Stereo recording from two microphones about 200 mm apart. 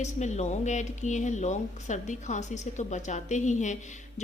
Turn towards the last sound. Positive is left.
turn(degrees=35)  # may be behind; listen again after turning